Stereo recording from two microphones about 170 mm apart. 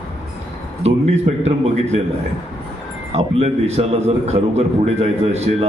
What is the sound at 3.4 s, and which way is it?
A man's voice, 35° right (ahead or behind).